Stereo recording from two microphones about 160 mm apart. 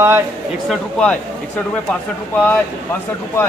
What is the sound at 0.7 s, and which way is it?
Speech, 5° left (ahead or behind).